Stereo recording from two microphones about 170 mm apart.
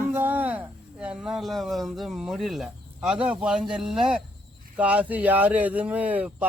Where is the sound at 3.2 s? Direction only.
5° right (ahead or behind).